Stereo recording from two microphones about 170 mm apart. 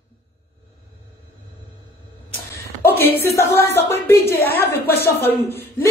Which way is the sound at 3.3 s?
15° left (ahead or behind).